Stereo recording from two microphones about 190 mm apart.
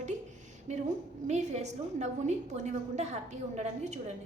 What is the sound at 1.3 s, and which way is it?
A woman's voice, 35° right (ahead or behind).